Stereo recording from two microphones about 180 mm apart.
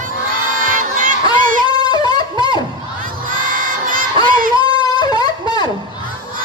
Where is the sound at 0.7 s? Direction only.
50° right (ahead or behind).